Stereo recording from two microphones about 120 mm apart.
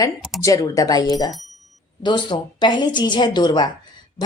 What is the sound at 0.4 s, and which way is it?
Speech, 30° left (ahead or behind).